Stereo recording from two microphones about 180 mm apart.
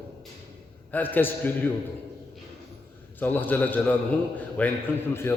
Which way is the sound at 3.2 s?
10° left (ahead or behind).